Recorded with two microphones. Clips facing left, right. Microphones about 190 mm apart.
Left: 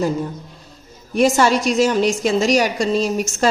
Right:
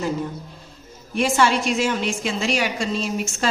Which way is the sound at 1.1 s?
40° left (ahead or behind).